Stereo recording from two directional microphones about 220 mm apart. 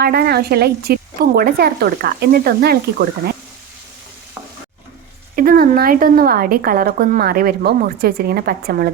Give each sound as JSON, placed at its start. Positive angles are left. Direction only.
{"t": 0.0, "sound": "speech", "side_deg": -45}
{"t": 5.4, "sound": "speech", "side_deg": -40}